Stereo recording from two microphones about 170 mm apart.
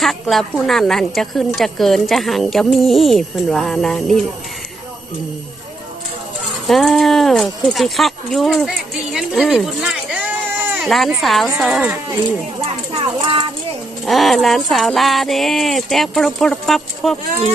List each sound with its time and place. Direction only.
0.0 s speech: centre (ahead or behind)
6.7 s speech: centre (ahead or behind)
9.1 s a sound: centre (ahead or behind)
10.8 s speech: centre (ahead or behind)
12.6 s a sound: 30° right (ahead or behind)
14.0 s speech: centre (ahead or behind)